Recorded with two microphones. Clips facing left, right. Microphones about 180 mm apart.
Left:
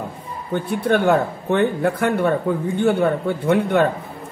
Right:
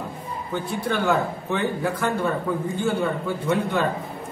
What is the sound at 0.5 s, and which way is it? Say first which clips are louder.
A man's voice: left 7 dB; 55° left (ahead or behind).